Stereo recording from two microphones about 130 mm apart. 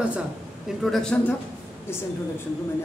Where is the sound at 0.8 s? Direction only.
5° left (ahead or behind).